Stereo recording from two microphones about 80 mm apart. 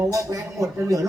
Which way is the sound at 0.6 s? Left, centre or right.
Right.